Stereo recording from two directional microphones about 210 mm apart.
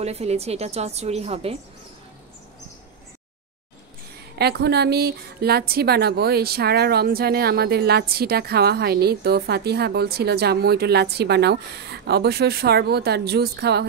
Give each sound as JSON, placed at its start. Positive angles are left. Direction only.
{"t": 0.0, "sound": "a woman's voice", "side_deg": -30}
{"t": 4.4, "sound": "a woman's voice", "side_deg": -50}